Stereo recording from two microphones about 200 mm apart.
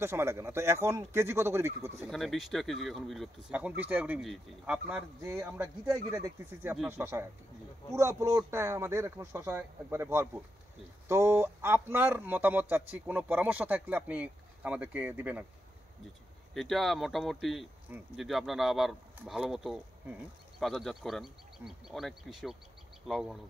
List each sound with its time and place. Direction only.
0.0 s speech: 15° right (ahead or behind)
1.7 s speech: 35° right (ahead or behind)
2.0 s speech: centre (ahead or behind)
16.5 s speech: centre (ahead or behind)